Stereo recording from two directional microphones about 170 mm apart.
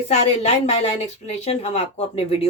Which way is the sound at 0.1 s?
40° left (ahead or behind).